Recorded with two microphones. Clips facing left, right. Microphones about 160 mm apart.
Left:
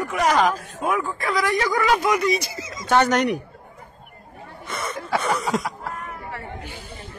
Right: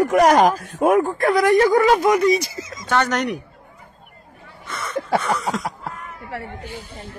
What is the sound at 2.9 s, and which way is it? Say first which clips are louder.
Speech: left 2 dB; 5° left (ahead or behind).